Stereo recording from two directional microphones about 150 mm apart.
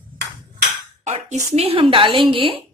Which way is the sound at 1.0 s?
50° right (ahead or behind).